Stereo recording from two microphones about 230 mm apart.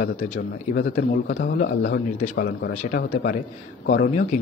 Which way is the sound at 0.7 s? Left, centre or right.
Left.